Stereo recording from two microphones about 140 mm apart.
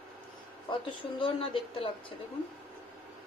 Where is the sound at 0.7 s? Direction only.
35° left (ahead or behind).